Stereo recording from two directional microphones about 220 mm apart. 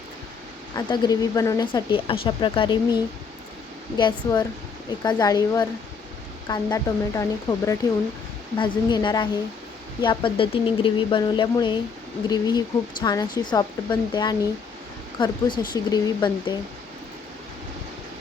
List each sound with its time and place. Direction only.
0.8 s a woman's voice: 20° left (ahead or behind)